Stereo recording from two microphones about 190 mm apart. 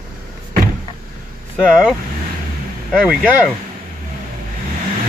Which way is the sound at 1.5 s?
Centre (ahead or behind).